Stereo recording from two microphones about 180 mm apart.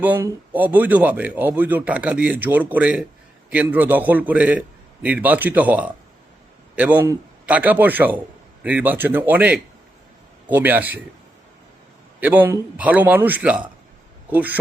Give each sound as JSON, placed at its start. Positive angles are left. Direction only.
{"t": 0.0, "sound": "speech", "side_deg": -10}
{"t": 12.2, "sound": "speech", "side_deg": -10}